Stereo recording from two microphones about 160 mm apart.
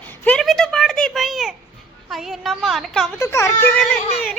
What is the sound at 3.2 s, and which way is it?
Speech, 20° left (ahead or behind).